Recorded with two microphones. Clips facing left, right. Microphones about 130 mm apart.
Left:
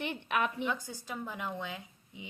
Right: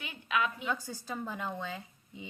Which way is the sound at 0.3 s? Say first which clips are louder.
Right 1 dB; 50° left (ahead or behind).